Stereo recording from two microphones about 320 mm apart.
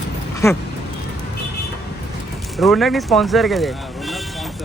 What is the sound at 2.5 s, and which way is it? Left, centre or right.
Speech, centre.